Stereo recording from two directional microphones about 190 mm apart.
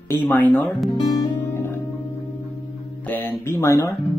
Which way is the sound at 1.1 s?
10° left (ahead or behind).